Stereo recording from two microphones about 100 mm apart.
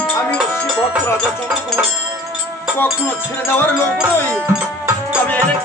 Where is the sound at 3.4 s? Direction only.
20° left (ahead or behind).